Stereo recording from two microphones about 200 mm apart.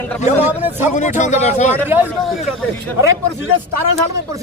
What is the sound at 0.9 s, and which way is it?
Speech, 40° left (ahead or behind).